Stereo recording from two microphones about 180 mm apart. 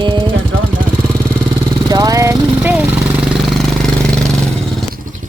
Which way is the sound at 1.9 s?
20° right (ahead or behind).